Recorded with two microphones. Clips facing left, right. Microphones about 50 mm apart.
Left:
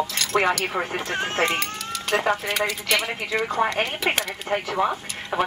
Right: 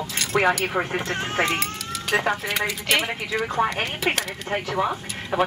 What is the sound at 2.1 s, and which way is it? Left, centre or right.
Speech, centre.